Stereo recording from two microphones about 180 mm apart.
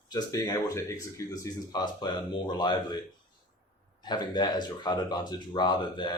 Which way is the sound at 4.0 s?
25° left (ahead or behind).